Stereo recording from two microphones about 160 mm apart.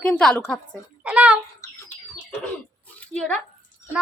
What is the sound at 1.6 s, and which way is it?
Bird, 15° left (ahead or behind).